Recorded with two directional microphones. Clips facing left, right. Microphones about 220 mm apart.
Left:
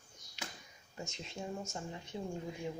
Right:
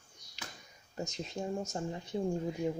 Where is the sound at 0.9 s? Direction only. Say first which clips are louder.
Right 6 dB; 40° right (ahead or behind).